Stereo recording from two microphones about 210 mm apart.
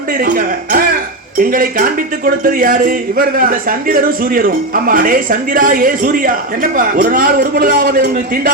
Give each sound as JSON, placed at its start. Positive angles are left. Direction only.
{"t": 0.1, "sound": "speech", "side_deg": -45}